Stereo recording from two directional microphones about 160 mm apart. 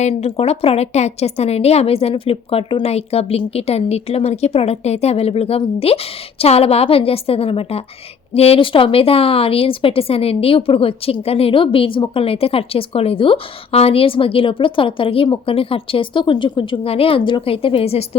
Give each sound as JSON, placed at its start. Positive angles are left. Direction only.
{"t": 0.0, "sound": "a woman's voice", "side_deg": 40}